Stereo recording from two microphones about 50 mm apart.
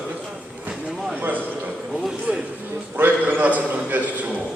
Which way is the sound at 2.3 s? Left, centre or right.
Right.